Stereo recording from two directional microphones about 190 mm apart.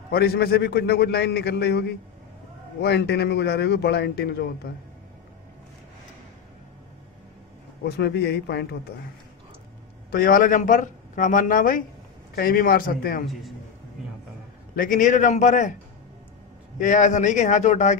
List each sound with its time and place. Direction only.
0.1 s a man's voice: 55° left (ahead or behind)
7.8 s a man's voice: 60° left (ahead or behind)
10.1 s a man's voice: 50° left (ahead or behind)
14.8 s a man's voice: 45° left (ahead or behind)
16.7 s a man's voice: 40° left (ahead or behind)